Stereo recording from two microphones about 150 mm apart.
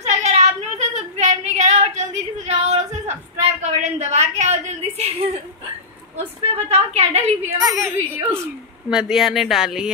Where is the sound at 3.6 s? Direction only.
50° right (ahead or behind).